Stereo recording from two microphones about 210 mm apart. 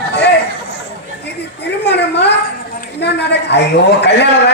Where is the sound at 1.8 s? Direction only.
55° left (ahead or behind).